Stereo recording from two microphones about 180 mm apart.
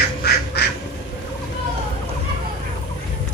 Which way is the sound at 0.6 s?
65° left (ahead or behind).